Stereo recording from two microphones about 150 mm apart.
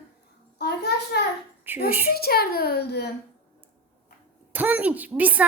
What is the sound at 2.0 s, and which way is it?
A child's voice, 90° left.